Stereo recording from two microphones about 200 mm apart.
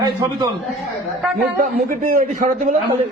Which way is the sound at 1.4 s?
50° right (ahead or behind).